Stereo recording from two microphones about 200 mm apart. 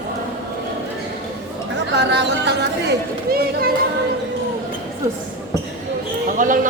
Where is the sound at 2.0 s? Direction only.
60° right (ahead or behind).